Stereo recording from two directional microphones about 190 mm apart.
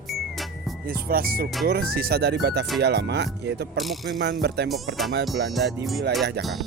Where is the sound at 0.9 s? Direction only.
50° right (ahead or behind).